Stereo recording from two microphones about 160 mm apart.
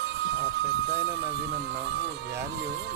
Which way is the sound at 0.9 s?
90° right.